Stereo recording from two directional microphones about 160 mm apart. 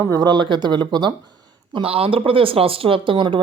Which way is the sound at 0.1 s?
25° right (ahead or behind).